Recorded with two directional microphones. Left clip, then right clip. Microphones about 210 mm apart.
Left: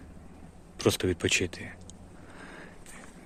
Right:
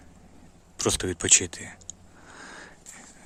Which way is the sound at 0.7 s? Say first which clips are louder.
Even; 15° right (ahead or behind).